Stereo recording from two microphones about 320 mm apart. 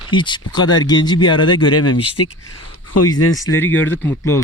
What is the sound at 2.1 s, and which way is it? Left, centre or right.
Speech, left.